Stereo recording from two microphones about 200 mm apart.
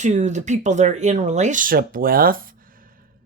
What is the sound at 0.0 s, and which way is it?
Speech, 35° right (ahead or behind).